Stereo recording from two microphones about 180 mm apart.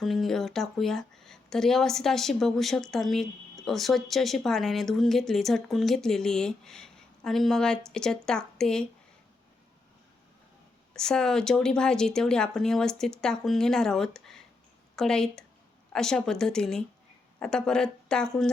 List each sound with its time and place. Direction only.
0.0 s speech: centre (ahead or behind)
10.9 s speech: 5° left (ahead or behind)